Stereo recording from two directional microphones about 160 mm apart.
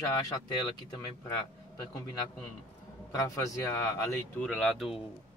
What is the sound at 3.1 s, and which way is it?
Speech, 20° left (ahead or behind).